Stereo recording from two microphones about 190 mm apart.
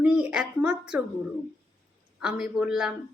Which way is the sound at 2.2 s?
5° right (ahead or behind).